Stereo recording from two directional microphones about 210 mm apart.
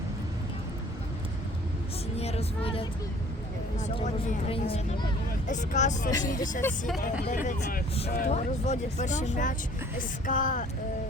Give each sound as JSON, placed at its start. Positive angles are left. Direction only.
{"t": 2.1, "sound": "speech", "side_deg": 30}
{"t": 6.1, "sound": "speech", "side_deg": 15}
{"t": 6.6, "sound": "speech", "side_deg": 5}
{"t": 7.0, "sound": "speech", "side_deg": 40}